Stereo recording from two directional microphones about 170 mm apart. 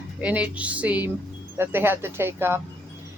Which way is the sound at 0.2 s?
10° right (ahead or behind).